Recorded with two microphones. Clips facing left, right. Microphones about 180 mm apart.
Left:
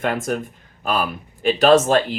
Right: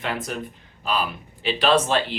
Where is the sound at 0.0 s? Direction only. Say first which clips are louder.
Left 6 dB; 50° left (ahead or behind).